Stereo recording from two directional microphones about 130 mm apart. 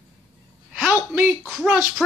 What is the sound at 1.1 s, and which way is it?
Speech, 20° right (ahead or behind).